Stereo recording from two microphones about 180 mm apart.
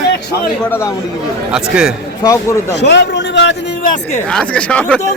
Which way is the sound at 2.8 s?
70° left (ahead or behind).